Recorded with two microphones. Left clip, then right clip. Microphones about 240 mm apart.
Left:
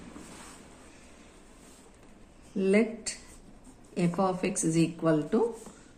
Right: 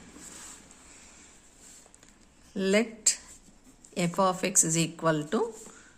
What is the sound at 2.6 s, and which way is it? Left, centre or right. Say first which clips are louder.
A woman's voice: even; right.